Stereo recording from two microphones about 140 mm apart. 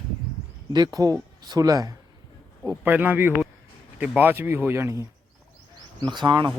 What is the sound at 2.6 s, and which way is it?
Speech, 15° right (ahead or behind).